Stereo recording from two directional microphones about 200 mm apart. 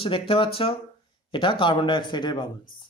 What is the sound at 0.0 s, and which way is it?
Speech, 25° left (ahead or behind).